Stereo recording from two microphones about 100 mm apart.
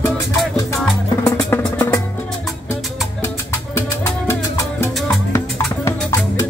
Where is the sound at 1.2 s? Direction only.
30° left (ahead or behind).